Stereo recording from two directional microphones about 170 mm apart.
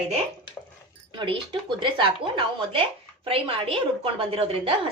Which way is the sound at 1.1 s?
30° right (ahead or behind).